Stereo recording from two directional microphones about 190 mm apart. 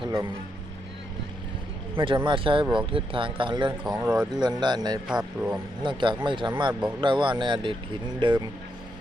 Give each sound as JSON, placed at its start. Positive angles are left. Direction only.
{"t": 0.0, "sound": "a sound", "side_deg": -25}
{"t": 2.0, "sound": "speech", "side_deg": -25}
{"t": 3.8, "sound": "speech", "side_deg": -5}
{"t": 4.3, "sound": "speech", "side_deg": -20}
{"t": 5.0, "sound": "speech", "side_deg": -5}
{"t": 5.8, "sound": "speech", "side_deg": -25}